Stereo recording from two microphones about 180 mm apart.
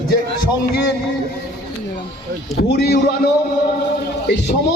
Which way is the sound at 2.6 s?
65° left (ahead or behind).